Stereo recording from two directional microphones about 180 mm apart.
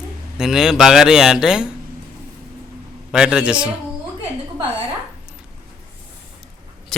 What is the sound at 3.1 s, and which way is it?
Speech, 5° right (ahead or behind).